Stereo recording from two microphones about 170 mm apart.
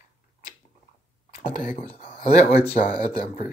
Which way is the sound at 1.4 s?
50° left (ahead or behind).